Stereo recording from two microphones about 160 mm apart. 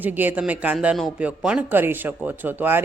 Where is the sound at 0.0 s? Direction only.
10° right (ahead or behind).